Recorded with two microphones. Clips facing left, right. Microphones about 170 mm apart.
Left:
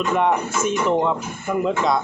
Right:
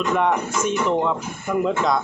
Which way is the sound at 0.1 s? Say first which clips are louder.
Left 1 dB; 5° left (ahead or behind).